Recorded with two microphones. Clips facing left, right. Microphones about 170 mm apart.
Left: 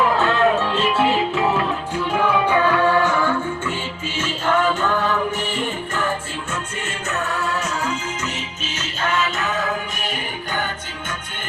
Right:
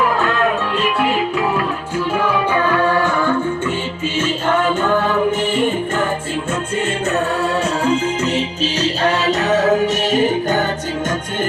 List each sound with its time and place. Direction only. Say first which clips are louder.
0.0 s music: even; 25° left (ahead or behind)
2.6 s music: right 1 dB; 10° right (ahead or behind)
7.1 s music: right 4 dB; 30° right (ahead or behind)